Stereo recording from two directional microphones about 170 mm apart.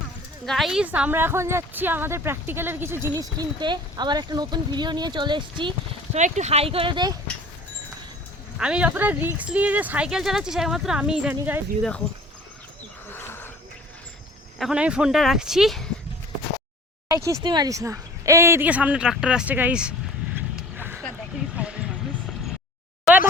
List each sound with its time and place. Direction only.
0.4 s a woman's voice: centre (ahead or behind); by 5.7 s 30° right (ahead or behind)
6.1 s speech: 45° right (ahead or behind); by 7.2 s 25° right (ahead or behind)
8.5 s speech: 5° right (ahead or behind)
13.1 s wild animals: 15° left (ahead or behind)
14.6 s speech: 5° right (ahead or behind)
17.1 s a woman's voice: 20° right (ahead or behind)
20.3 s clip-clop: 10° right (ahead or behind)
21.5 s a sound: 5° right (ahead or behind)